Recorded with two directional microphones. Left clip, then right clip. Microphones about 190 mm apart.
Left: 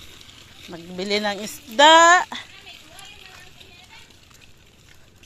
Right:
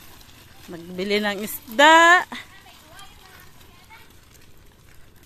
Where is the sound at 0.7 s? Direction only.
5° right (ahead or behind).